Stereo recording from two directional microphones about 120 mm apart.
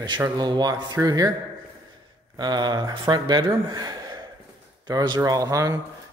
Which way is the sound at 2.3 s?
35° right (ahead or behind).